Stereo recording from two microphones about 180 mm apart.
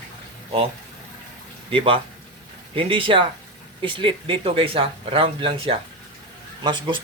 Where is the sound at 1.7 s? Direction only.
30° right (ahead or behind).